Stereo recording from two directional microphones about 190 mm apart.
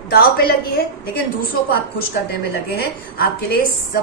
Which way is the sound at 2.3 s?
55° left (ahead or behind).